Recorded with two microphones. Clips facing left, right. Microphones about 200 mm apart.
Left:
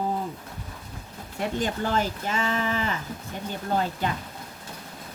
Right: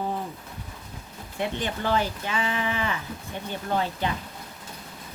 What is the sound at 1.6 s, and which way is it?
Speech, 45° left (ahead or behind).